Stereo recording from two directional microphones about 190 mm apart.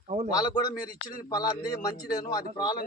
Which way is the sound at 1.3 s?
20° left (ahead or behind).